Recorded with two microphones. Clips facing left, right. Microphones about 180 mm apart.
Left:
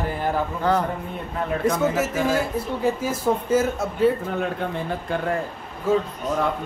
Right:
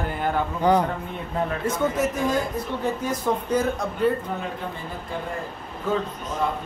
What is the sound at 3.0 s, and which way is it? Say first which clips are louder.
Speech: left 2 dB; 5° left (ahead or behind).